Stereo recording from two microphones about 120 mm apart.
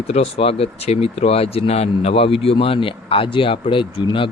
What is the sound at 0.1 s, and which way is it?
Speech, 55° left (ahead or behind).